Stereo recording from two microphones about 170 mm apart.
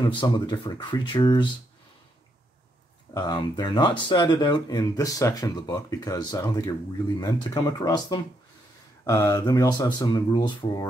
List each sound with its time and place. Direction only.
0.0 s speech: 30° left (ahead or behind)
3.2 s speech: 25° left (ahead or behind)